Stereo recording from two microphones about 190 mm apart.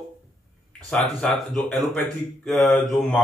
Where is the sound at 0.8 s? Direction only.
5° left (ahead or behind).